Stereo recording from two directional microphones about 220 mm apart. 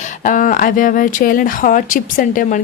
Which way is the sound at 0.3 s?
35° left (ahead or behind).